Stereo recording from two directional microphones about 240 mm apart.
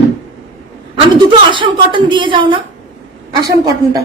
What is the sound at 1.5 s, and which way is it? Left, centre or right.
A woman's voice, right.